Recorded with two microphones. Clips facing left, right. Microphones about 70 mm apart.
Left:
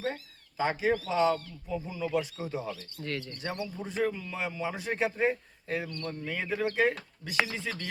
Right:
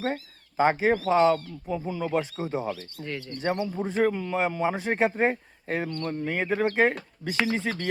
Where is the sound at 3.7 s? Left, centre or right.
Right.